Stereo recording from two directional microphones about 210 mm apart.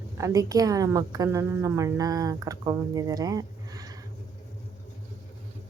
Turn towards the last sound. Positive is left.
turn(degrees=-15)  # may be behind; listen again after turning